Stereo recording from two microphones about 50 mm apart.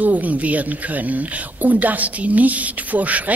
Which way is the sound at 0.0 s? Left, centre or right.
Right.